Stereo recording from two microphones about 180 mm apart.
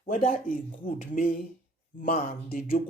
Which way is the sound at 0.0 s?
50° left (ahead or behind).